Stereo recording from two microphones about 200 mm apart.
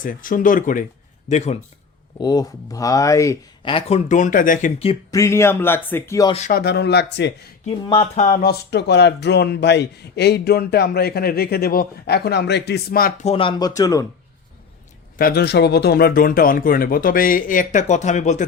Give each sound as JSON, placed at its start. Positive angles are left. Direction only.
{"t": 0.0, "sound": "speech", "side_deg": 45}
{"t": 2.1, "sound": "speech", "side_deg": 20}
{"t": 5.1, "sound": "a man's voice", "side_deg": 15}
{"t": 6.5, "sound": "speech", "side_deg": 50}
{"t": 7.6, "sound": "speech", "side_deg": 30}
{"t": 13.2, "sound": "speech", "side_deg": 25}
{"t": 15.2, "sound": "speech", "side_deg": 50}